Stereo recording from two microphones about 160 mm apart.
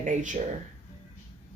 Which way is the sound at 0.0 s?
50° right (ahead or behind).